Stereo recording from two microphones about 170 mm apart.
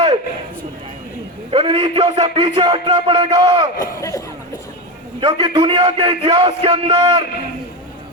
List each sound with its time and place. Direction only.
1.5 s a man's voice: 30° right (ahead or behind)
3.8 s speech: 20° left (ahead or behind)
5.2 s a man's voice: 30° right (ahead or behind)